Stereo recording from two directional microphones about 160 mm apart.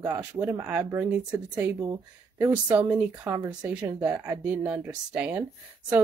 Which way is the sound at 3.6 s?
5° right (ahead or behind).